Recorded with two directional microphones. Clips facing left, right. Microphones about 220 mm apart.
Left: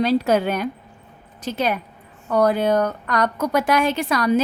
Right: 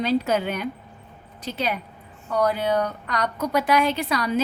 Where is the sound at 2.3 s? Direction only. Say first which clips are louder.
Left 4 dB; 50° left (ahead or behind).